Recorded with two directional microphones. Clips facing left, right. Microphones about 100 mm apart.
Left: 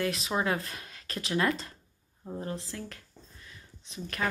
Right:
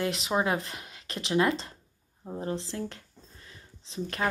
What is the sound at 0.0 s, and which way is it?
Speech, 25° right (ahead or behind).